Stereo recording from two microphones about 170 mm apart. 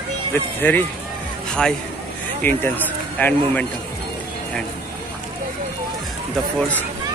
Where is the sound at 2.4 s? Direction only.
10° left (ahead or behind).